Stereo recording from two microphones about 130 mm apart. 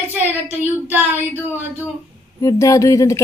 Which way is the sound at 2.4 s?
25° left (ahead or behind).